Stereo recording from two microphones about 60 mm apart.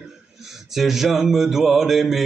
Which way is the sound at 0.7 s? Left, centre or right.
Centre.